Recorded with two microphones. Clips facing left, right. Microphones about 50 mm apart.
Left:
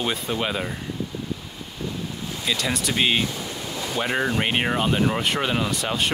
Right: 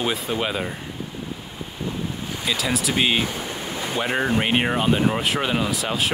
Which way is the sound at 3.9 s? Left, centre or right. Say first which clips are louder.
Right 1 dB; centre.